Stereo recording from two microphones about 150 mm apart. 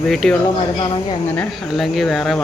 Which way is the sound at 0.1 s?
Centre (ahead or behind).